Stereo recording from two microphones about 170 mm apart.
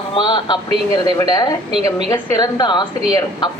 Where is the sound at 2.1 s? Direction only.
10° left (ahead or behind).